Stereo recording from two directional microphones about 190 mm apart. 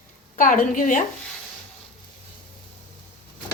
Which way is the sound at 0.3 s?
45° left (ahead or behind).